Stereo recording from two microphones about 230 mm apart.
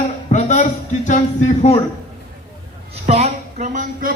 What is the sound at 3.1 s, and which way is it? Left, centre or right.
A woman's voice, right.